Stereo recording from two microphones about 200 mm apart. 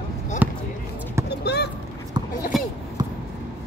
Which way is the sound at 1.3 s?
55° left (ahead or behind).